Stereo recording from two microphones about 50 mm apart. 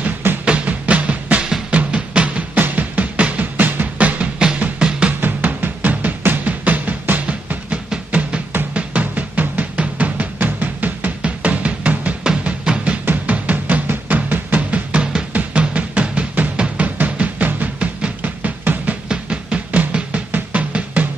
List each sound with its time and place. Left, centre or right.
0.5 s music: right
3.5 s music: right
4.7 s music: centre
5.2 s drum: right
8.7 s music: right
12.2 s music: centre
13.0 s music: right
19.0 s music: right